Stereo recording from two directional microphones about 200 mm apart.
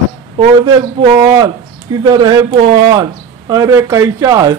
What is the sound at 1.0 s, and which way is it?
Speech, 20° right (ahead or behind).